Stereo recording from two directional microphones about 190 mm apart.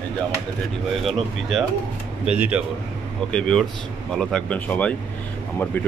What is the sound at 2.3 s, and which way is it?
A man's voice, 5° right (ahead or behind).